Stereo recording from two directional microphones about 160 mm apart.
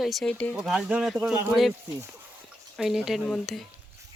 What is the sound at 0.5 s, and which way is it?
Speech, 5° right (ahead or behind).